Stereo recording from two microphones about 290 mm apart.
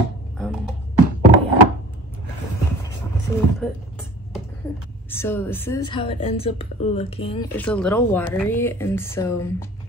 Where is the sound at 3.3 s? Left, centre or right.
Centre.